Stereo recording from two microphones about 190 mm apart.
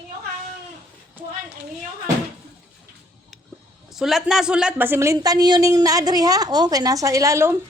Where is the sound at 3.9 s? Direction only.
Centre (ahead or behind).